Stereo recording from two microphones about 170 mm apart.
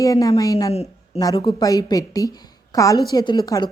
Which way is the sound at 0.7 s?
35° left (ahead or behind).